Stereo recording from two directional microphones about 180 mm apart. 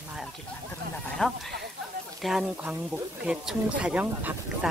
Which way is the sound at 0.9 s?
Centre (ahead or behind).